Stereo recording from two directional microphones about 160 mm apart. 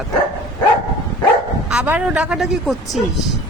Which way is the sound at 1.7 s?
5° right (ahead or behind).